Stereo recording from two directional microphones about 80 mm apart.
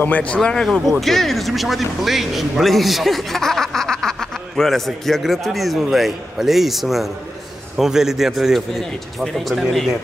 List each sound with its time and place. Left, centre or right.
0.0 s speech: centre
0.4 s speech: centre